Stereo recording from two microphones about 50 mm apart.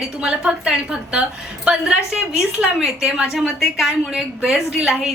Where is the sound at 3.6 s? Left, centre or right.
Centre.